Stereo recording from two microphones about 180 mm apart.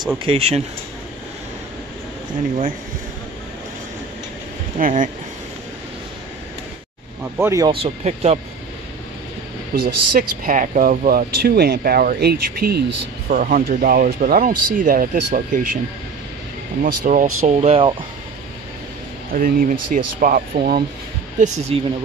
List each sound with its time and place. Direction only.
0.2 s speech: 35° right (ahead or behind)
4.7 s speech: 50° right (ahead or behind)
7.3 s speech: 15° right (ahead or behind)
7.8 s speech: 35° right (ahead or behind)
9.8 s speech: 55° right (ahead or behind)
13.3 s speech: 50° right (ahead or behind)
16.8 s speech: 45° right (ahead or behind)
19.3 s speech: 50° right (ahead or behind)
21.7 s speech: 30° right (ahead or behind)